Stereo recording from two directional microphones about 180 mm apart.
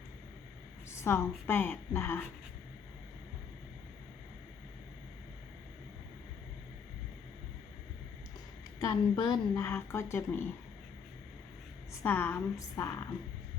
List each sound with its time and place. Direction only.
0.9 s a sound: 15° left (ahead or behind)
1.5 s speech: 10° left (ahead or behind)
8.8 s a woman's voice: 25° left (ahead or behind)
9.6 s speech: 15° left (ahead or behind)
12.0 s speech: 10° left (ahead or behind)